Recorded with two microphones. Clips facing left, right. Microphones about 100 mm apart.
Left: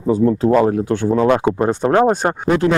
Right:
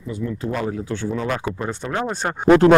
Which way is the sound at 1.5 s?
50° left (ahead or behind).